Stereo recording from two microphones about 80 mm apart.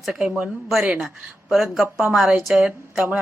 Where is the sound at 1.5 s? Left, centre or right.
Centre.